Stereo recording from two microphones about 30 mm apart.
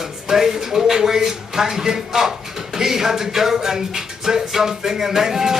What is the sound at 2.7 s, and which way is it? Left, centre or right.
Music, centre.